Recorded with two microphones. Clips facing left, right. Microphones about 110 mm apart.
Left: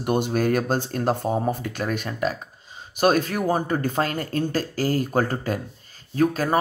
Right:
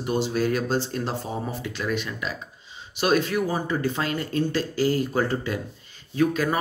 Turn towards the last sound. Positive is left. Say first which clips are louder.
# left 2 dB
turn(degrees=40)  # may be behind; listen again after turning